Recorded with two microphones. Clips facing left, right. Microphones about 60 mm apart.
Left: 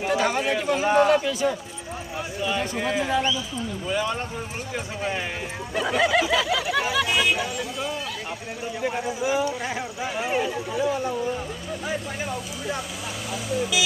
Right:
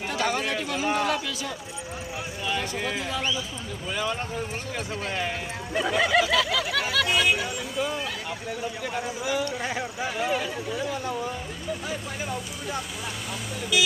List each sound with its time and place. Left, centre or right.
0.1 s chatter: centre
0.9 s speech: left
2.4 s speech: centre
5.0 s speech: centre
8.8 s speech: centre
13.5 s speech: centre